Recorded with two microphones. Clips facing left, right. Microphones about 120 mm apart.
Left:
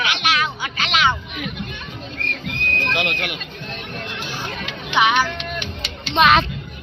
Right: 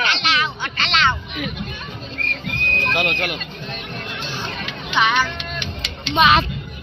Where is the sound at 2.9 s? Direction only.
45° right (ahead or behind).